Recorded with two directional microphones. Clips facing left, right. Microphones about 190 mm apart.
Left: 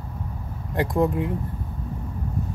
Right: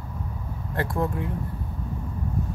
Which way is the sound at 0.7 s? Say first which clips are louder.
Left 5 dB; 15° left (ahead or behind).